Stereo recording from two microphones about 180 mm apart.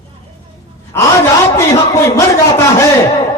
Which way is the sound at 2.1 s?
15° left (ahead or behind).